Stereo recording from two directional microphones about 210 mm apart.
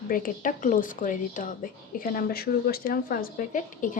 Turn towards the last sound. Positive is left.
turn(degrees=40)  # may be behind; listen again after turning